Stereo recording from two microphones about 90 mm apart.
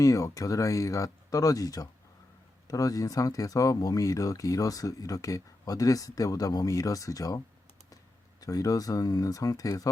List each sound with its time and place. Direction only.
0.0 s speech: 40° left (ahead or behind)